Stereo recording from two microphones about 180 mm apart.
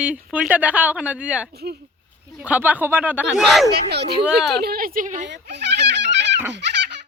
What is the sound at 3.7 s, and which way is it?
A woman's voice, 65° right (ahead or behind).